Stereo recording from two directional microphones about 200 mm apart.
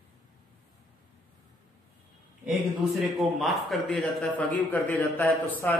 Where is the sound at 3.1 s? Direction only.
Centre (ahead or behind).